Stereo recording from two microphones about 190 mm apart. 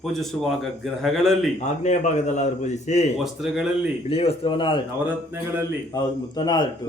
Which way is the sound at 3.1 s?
Centre (ahead or behind).